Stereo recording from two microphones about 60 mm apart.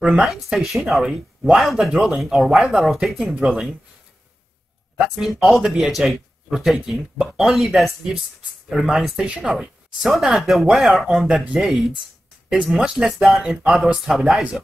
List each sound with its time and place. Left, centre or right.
0.0 s speech: centre
0.3 s speech: centre
1.4 s speech: centre
1.9 s speech: centre
4.9 s speech: centre
9.9 s speech: centre
12.9 s speech: centre
13.4 s speech: centre